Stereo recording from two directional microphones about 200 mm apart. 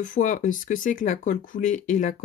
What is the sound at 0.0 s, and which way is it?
Speech, 40° left (ahead or behind).